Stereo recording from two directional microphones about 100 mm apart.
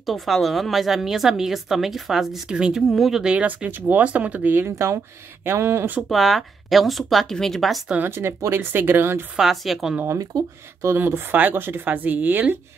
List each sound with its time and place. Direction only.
0.0 s a woman's voice: centre (ahead or behind); by 5.9 s 25° right (ahead or behind)
5.9 s a woman's voice: centre (ahead or behind)
7.9 s speech: 20° right (ahead or behind)
9.4 s a woman's voice: centre (ahead or behind)
10.1 s speech: 30° right (ahead or behind); by 12.5 s 15° right (ahead or behind)